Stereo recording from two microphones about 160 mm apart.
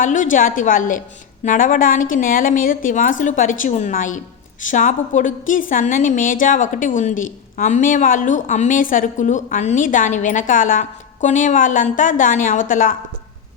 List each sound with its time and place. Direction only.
0.0 s a woman's voice: 55° left (ahead or behind)